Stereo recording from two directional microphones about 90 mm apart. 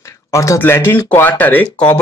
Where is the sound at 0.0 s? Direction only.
35° left (ahead or behind).